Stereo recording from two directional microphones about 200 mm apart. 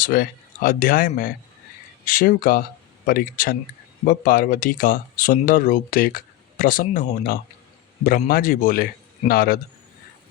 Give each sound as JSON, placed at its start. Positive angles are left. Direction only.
{"t": 0.0, "sound": "speech", "side_deg": 45}